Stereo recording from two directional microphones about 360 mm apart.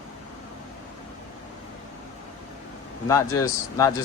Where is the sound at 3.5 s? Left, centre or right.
Centre.